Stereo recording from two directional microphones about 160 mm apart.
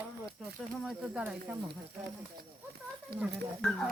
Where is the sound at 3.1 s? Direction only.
75° right (ahead or behind).